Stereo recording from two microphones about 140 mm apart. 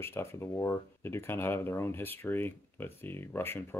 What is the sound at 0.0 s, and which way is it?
Speech, 15° left (ahead or behind).